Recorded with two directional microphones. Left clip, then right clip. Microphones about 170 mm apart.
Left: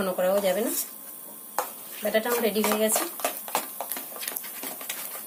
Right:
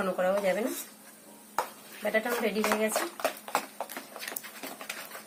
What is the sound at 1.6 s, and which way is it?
Dishes, 15° left (ahead or behind).